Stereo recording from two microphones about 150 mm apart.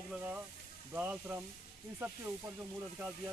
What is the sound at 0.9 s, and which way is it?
Speech, 10° right (ahead or behind).